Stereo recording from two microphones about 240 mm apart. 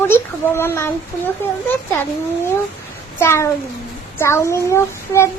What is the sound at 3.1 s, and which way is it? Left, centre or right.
Speech, centre.